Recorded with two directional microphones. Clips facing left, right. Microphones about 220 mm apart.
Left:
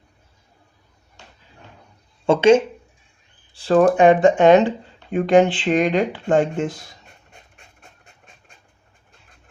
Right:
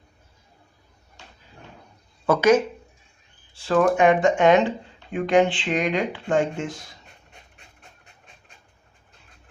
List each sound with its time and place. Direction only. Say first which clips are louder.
2.2 s speech: left 4 dB; 25° left (ahead or behind)